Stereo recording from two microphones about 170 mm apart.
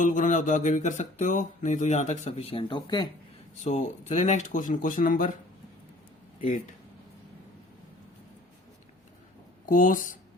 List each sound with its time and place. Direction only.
0.0 s speech: 50° left (ahead or behind); by 3.1 s 25° left (ahead or behind)
3.6 s speech: 45° left (ahead or behind)
9.6 s speech: 50° left (ahead or behind)